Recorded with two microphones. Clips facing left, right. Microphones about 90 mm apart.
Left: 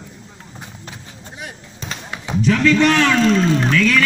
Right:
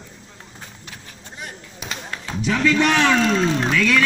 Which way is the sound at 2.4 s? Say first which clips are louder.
Left 4 dB; 15° right (ahead or behind).